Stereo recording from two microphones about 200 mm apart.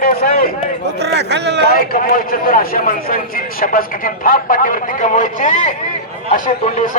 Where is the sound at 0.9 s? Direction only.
55° right (ahead or behind).